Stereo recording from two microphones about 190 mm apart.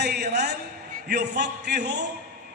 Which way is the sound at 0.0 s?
60° right (ahead or behind).